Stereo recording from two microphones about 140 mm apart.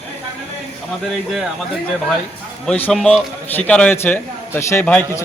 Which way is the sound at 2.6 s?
10° left (ahead or behind).